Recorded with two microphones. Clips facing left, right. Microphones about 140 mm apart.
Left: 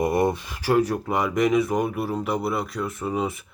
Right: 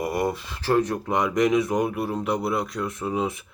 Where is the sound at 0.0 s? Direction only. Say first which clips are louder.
Left 4 dB; 25° left (ahead or behind).